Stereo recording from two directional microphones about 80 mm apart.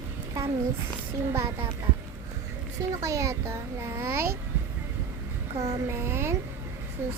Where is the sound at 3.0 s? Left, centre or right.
Right.